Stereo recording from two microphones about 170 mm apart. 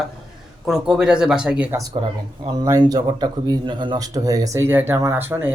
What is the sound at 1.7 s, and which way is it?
Speech, 20° right (ahead or behind).